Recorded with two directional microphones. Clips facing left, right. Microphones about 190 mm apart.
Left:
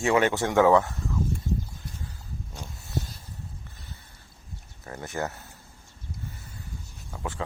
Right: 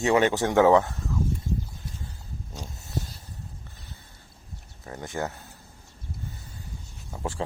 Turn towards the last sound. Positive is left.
turn(degrees=-30)  # may be behind; listen again after turning